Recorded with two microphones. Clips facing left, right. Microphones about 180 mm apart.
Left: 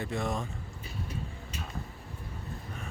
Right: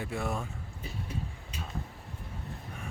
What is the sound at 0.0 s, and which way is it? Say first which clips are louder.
Speech: left 1 dB; 10° right (ahead or behind).